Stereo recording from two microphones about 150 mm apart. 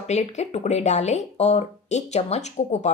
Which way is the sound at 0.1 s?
50° left (ahead or behind).